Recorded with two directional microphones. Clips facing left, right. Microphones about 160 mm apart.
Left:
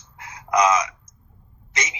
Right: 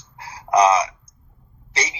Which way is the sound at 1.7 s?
30° right (ahead or behind).